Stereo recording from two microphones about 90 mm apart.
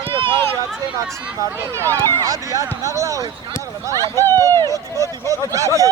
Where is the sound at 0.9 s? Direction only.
35° right (ahead or behind).